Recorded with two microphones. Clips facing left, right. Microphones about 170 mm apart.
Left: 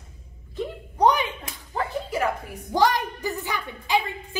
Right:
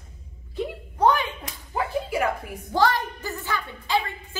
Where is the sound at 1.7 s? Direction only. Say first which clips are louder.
Right 1 dB; 10° right (ahead or behind).